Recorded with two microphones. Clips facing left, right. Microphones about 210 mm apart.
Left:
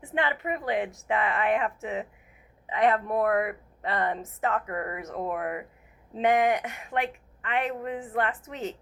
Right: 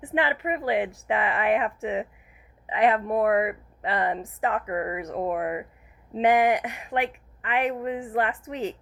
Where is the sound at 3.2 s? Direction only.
15° right (ahead or behind).